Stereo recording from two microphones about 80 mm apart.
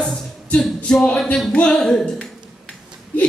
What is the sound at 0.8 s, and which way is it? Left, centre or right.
A man's voice, centre.